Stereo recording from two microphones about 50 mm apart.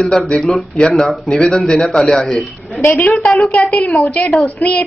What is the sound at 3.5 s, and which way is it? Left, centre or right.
A woman's voice, left.